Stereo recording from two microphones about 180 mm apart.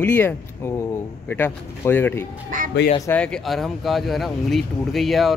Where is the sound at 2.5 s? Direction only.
45° right (ahead or behind).